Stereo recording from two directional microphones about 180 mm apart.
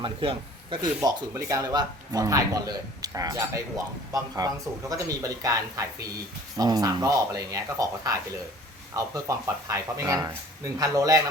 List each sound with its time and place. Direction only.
0.0 s speech: 30° right (ahead or behind)
1.0 s speech: 20° right (ahead or behind)